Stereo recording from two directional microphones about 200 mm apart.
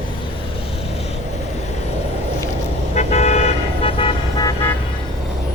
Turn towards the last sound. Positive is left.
turn(degrees=20)  # may be behind; listen again after turning